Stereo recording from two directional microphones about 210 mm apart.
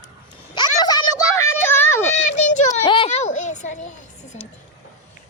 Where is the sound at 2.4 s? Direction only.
35° left (ahead or behind).